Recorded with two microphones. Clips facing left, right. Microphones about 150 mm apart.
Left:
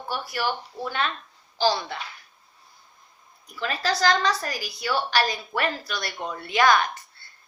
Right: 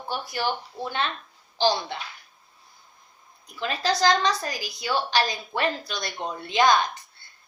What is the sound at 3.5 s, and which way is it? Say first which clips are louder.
A woman's voice: right 1 dB; 20° right (ahead or behind).